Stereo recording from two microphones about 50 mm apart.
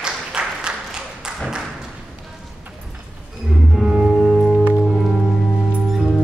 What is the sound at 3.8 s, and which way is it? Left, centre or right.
Music, centre.